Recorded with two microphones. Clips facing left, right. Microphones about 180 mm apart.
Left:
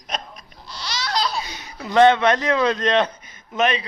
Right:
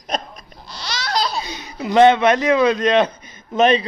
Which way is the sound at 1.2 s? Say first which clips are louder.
Right 2 dB; 25° right (ahead or behind).